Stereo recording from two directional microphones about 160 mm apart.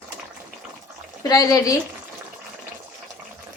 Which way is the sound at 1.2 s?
20° left (ahead or behind).